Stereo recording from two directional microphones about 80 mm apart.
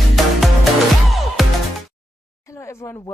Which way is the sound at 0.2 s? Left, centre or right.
Centre.